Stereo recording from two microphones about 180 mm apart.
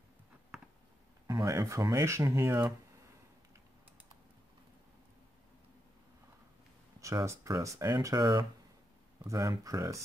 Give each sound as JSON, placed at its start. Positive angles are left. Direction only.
{"t": 0.5, "sound": "a sound", "side_deg": 0}
{"t": 1.2, "sound": "speech", "side_deg": -20}
{"t": 7.0, "sound": "speech", "side_deg": -15}